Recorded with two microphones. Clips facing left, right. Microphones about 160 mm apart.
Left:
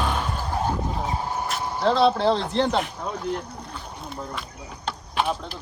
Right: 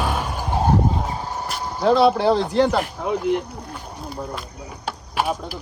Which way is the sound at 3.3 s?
5° right (ahead or behind).